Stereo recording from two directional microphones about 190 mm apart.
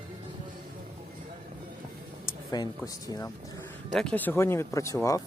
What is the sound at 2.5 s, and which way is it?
Speech, 20° left (ahead or behind).